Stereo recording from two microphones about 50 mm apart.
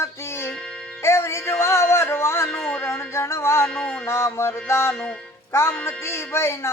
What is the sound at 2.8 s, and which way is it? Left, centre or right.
Speech, left.